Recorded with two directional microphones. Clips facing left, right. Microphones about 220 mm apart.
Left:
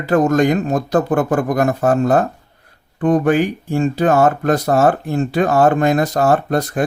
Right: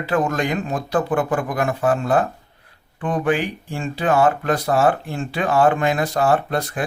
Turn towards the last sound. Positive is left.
turn(degrees=45)  # may be behind; listen again after turning